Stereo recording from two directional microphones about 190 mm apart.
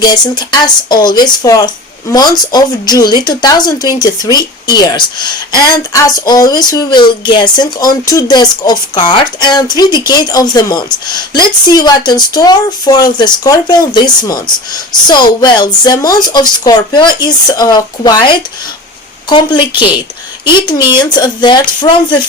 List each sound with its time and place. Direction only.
0.0 s a woman's voice: 20° left (ahead or behind)